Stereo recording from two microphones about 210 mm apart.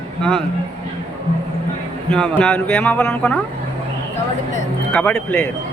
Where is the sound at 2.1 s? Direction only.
5° left (ahead or behind).